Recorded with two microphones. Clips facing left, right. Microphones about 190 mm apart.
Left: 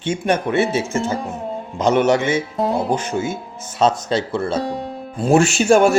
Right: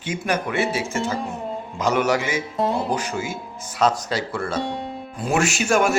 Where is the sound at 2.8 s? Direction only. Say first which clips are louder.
Left 4 dB; 25° left (ahead or behind).